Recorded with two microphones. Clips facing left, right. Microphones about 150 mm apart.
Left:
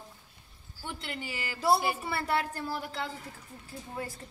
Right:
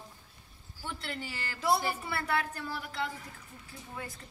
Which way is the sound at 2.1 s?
30° left (ahead or behind).